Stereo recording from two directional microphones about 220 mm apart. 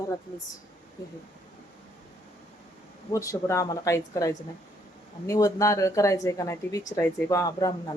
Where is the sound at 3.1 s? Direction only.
15° left (ahead or behind).